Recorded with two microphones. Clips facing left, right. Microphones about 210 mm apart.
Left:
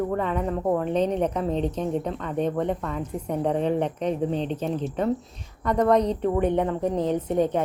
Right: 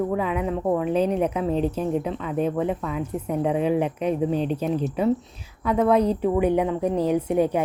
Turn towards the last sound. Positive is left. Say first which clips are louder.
# right 2 dB
turn(degrees=-10)  # may be behind; listen again after turning